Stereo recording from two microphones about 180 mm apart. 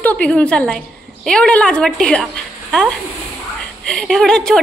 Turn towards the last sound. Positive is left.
turn(degrees=5)  # may be behind; listen again after turning